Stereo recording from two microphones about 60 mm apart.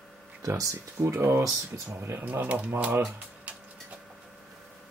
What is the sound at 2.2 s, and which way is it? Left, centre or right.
Speech, right.